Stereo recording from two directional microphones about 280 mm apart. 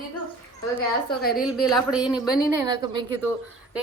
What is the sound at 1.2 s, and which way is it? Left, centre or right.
Speech, left.